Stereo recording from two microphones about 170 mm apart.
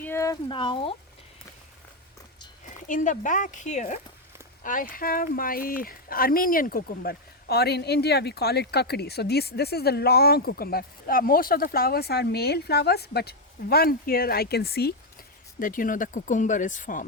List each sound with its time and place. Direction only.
0.0 s a sound: 15° left (ahead or behind)
0.4 s speech: 30° left (ahead or behind)
2.8 s speech: 50° left (ahead or behind); by 14.9 s 65° left (ahead or behind)
15.5 s speech: 55° left (ahead or behind)